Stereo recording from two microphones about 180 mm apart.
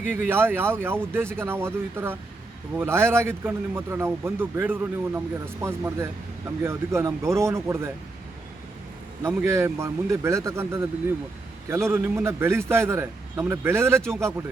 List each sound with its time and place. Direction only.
0.1 s speech: 10° right (ahead or behind)
9.2 s speech: 15° right (ahead or behind)